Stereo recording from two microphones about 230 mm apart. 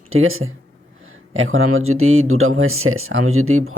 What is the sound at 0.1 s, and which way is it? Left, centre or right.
Speech, right.